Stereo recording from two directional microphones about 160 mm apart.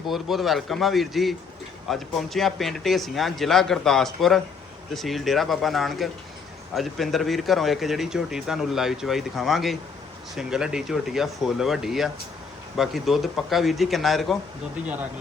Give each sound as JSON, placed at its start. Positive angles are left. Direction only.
{"t": 0.1, "sound": "speech", "side_deg": 0}